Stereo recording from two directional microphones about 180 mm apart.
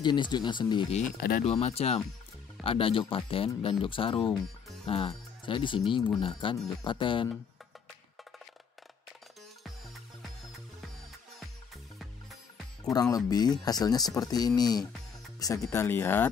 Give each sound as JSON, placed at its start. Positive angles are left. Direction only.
{"t": 0.0, "sound": "speech", "side_deg": 25}
{"t": 12.9, "sound": "speech", "side_deg": 20}